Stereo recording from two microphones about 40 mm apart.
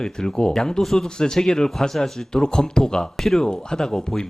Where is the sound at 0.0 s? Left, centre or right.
Centre.